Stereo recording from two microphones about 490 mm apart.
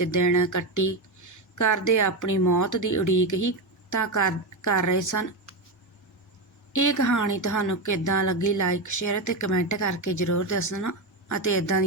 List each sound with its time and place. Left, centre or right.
0.0 s speech: left
6.7 s speech: left